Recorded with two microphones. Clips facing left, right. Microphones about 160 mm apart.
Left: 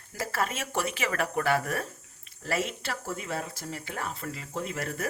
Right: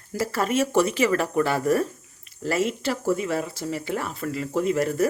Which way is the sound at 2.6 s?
Centre (ahead or behind).